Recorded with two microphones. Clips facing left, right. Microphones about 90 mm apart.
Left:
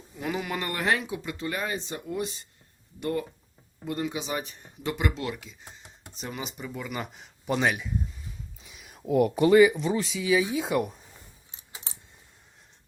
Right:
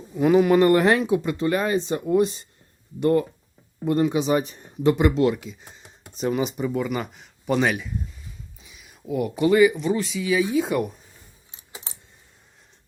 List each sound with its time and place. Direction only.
0.2 s speech: 30° right (ahead or behind)
6.1 s speech: 15° right (ahead or behind)
7.4 s speech: 10° left (ahead or behind)
8.6 s a sound: 55° left (ahead or behind)
9.4 s speech: 30° left (ahead or behind)